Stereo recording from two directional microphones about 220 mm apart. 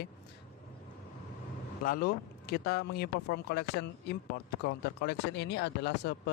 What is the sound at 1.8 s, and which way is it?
Speech, 40° left (ahead or behind).